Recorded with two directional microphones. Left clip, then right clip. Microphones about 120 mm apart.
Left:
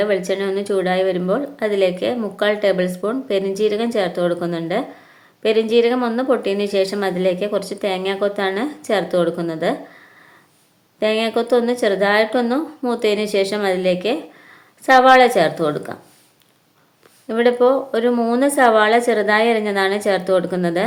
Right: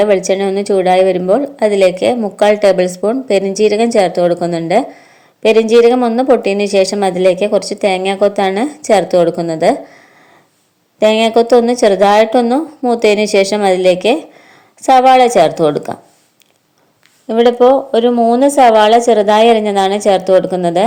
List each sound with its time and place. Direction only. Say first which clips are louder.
0.3 s a woman's voice: right 7 dB; 40° right (ahead or behind)
11.0 s a woman's voice: right 9 dB; 45° right (ahead or behind)
17.2 s a woman's voice: right 6 dB; 35° right (ahead or behind)
18.1 s a woman's voice: right 8 dB; 25° right (ahead or behind)